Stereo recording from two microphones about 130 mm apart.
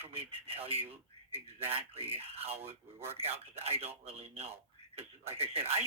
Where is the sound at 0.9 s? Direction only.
50° right (ahead or behind).